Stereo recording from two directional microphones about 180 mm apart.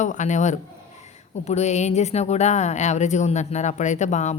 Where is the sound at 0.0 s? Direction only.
40° left (ahead or behind).